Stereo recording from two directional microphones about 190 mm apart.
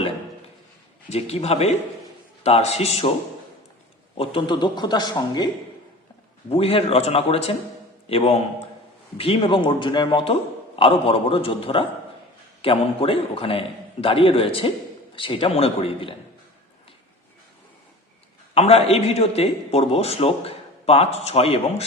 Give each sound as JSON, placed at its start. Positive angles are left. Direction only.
{"t": 1.1, "sound": "a man's voice", "side_deg": 35}
{"t": 4.2, "sound": "a man's voice", "side_deg": 25}
{"t": 6.5, "sound": "a man's voice", "side_deg": 30}
{"t": 18.5, "sound": "a man's voice", "side_deg": 30}